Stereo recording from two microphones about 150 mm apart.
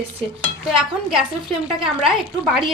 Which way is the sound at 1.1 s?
5° right (ahead or behind).